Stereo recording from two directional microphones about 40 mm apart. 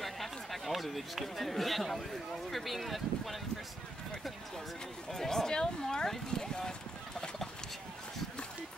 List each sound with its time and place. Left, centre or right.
0.0 s speech: centre
5.1 s speech: centre